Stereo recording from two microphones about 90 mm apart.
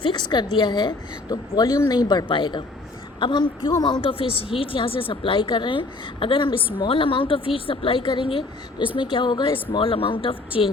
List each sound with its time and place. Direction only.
0.0 s a woman's voice: 55° left (ahead or behind)
2.2 s a woman's voice: 65° left (ahead or behind)
3.7 s a woman's voice: 50° left (ahead or behind)
4.0 s a woman's voice: 85° left; by 6.7 s 70° left (ahead or behind)
6.7 s speech: 80° left
9.0 s a woman's voice: 60° left (ahead or behind)
9.7 s a woman's voice: 85° left